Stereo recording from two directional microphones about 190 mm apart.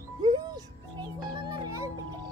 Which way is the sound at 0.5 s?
20° right (ahead or behind).